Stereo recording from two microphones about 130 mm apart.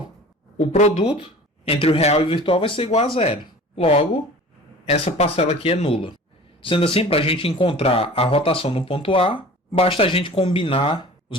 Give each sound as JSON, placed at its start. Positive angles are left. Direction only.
{"t": 0.5, "sound": "speech", "side_deg": 60}
{"t": 0.9, "sound": "speech", "side_deg": 40}
{"t": 2.2, "sound": "speech", "side_deg": 40}
{"t": 4.9, "sound": "speech", "side_deg": 50}